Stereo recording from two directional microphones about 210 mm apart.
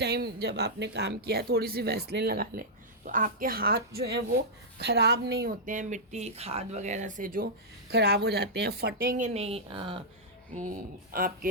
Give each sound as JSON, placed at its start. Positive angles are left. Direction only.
{"t": 0.0, "sound": "speech", "side_deg": -50}
{"t": 7.9, "sound": "speech", "side_deg": -50}
{"t": 10.5, "sound": "speech", "side_deg": -40}